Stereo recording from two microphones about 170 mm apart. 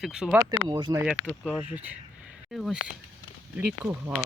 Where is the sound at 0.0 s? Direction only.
5° right (ahead or behind).